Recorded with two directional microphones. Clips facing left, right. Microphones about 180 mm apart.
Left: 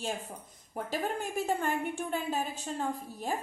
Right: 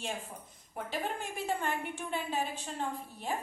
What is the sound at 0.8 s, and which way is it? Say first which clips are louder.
A woman's voice: left 3 dB; 40° left (ahead or behind).